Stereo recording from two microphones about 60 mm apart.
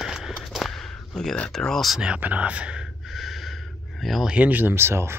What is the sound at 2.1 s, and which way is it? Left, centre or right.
Speech, right.